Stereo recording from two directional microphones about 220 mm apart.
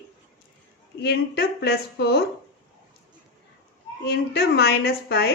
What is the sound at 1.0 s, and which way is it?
Speech, 45° left (ahead or behind).